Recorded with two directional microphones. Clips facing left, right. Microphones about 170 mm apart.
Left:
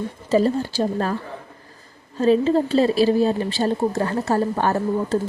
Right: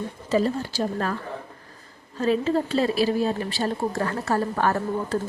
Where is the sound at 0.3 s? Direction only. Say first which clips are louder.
Left 4 dB; 30° left (ahead or behind).